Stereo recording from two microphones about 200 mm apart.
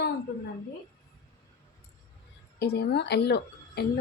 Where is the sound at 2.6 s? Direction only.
55° left (ahead or behind).